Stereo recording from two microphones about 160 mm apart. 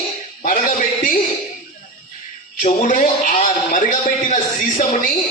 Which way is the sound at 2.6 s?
50° left (ahead or behind).